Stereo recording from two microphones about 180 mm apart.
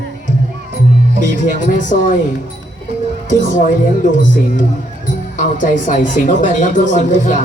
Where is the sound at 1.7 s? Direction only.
45° left (ahead or behind).